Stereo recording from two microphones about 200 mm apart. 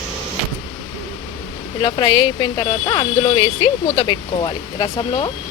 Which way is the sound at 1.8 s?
20° left (ahead or behind).